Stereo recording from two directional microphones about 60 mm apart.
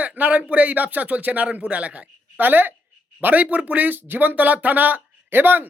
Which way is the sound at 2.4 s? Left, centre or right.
Right.